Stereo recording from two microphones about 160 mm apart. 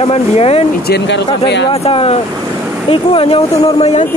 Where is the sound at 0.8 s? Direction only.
90° left.